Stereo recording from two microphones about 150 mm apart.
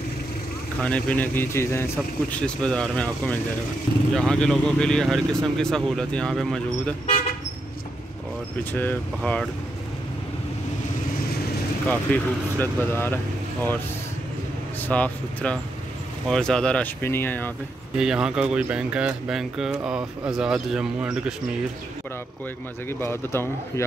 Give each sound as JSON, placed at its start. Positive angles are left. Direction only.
{"t": 0.8, "sound": "speech", "side_deg": 10}
{"t": 8.7, "sound": "speech", "side_deg": 10}
{"t": 11.9, "sound": "speech", "side_deg": 15}
{"t": 14.8, "sound": "speech", "side_deg": 10}
{"t": 17.9, "sound": "speech", "side_deg": -5}
{"t": 22.8, "sound": "speech", "side_deg": 15}